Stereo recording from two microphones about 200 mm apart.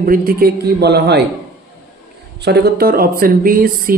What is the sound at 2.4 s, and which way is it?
Speech, 50° right (ahead or behind).